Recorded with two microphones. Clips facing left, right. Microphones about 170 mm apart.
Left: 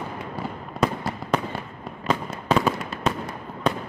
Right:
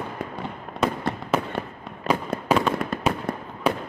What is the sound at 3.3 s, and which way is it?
Fireworks, 55° right (ahead or behind).